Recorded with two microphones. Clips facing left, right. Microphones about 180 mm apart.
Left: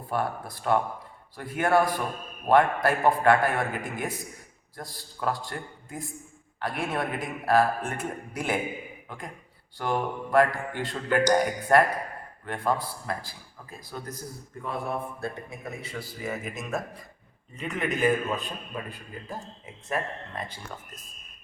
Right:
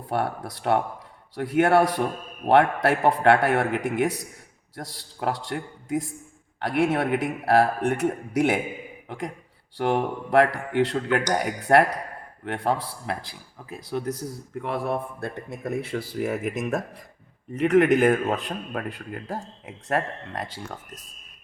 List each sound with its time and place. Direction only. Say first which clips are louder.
0.1 s a man's voice: right 3 dB; 75° right (ahead or behind)
17.5 s a man's voice: right 13 dB; 80° right